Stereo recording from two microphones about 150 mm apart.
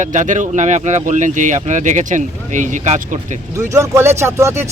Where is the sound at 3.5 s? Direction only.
20° right (ahead or behind).